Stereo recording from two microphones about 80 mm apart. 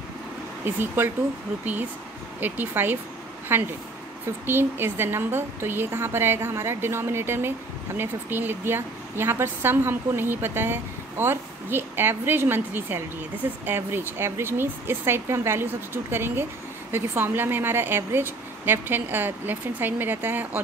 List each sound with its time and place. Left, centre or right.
0.7 s a woman's voice: right
2.4 s a woman's voice: right